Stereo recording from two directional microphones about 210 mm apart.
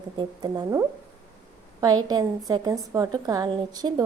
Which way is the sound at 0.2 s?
20° right (ahead or behind).